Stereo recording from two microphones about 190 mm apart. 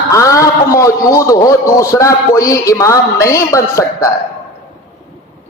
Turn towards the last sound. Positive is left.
turn(degrees=15)  # may be behind; listen again after turning